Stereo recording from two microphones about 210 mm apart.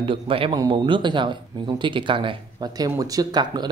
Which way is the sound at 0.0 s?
25° right (ahead or behind).